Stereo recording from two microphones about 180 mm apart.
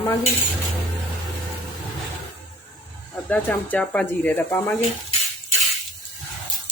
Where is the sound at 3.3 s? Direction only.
10° left (ahead or behind).